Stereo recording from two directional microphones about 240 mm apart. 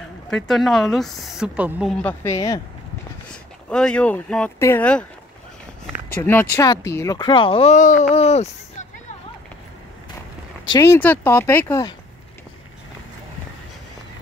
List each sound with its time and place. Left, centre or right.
0.3 s speech: centre
3.3 s speech: centre
6.5 s speech: centre
10.6 s speech: centre